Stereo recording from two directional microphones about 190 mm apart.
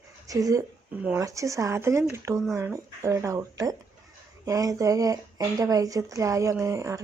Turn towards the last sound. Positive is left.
turn(degrees=-15)  # may be behind; listen again after turning